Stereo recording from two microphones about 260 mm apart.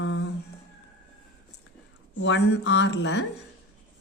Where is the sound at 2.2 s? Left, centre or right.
Left.